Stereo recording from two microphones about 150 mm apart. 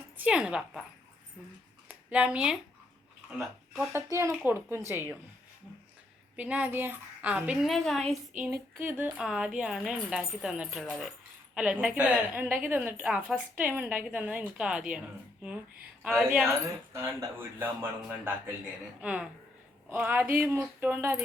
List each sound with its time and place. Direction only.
0.2 s speech: 5° right (ahead or behind)
1.9 s speech: 10° right (ahead or behind)
3.9 s speech: 20° right (ahead or behind)
6.3 s speech: 10° right (ahead or behind)
8.8 s speech: 10° right (ahead or behind)
16.1 s speech: centre (ahead or behind)
16.6 s speech: 20° right (ahead or behind)